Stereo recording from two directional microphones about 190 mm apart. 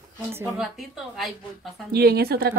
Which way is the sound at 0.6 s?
Centre (ahead or behind).